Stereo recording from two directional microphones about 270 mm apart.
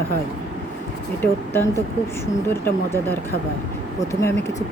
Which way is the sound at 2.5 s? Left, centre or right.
Centre.